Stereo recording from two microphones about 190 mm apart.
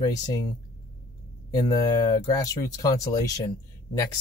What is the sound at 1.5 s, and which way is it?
Speech, 20° left (ahead or behind).